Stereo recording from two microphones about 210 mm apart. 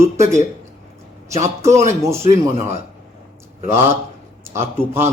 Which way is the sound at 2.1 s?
30° right (ahead or behind).